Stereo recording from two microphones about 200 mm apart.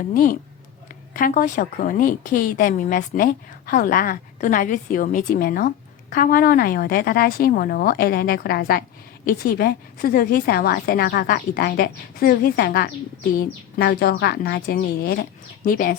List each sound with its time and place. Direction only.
0.0 s a woman's voice: 40° left (ahead or behind)